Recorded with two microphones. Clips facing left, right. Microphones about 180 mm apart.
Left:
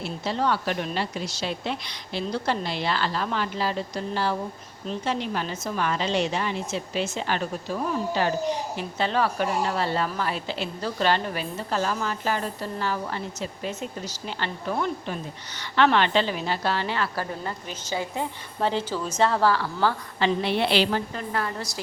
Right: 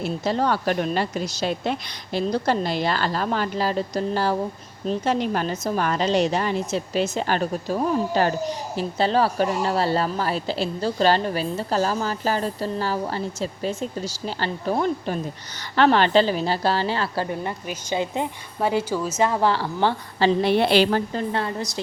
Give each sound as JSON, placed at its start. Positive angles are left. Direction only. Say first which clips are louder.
{"t": 0.0, "sound": "a woman's voice", "louder": "right 4 dB", "side_deg": -45}
{"t": 19.5, "sound": "a woman's voice", "louder": "right 2 dB", "side_deg": -25}
{"t": 21.1, "sound": "a woman's voice", "louder": "right 4 dB", "side_deg": -30}